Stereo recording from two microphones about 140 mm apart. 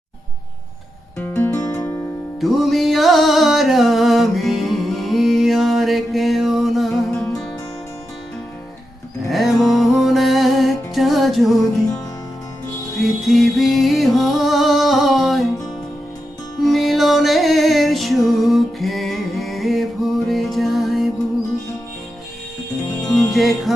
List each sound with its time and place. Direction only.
1.5 s music: 20° left (ahead or behind)
2.4 s music: centre (ahead or behind)
9.3 s music: centre (ahead or behind)
13.2 s music: centre (ahead or behind)
16.6 s music: centre (ahead or behind)
23.1 s music: centre (ahead or behind)